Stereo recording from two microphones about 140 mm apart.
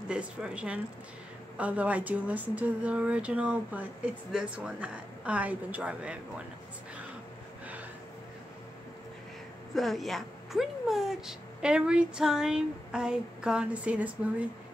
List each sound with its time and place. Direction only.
0.1 s speech: 5° right (ahead or behind)
9.8 s speech: centre (ahead or behind)